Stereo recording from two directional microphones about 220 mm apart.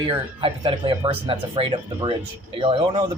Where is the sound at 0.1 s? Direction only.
20° right (ahead or behind).